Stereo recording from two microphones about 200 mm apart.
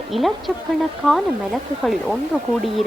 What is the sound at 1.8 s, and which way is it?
Speech, centre (ahead or behind).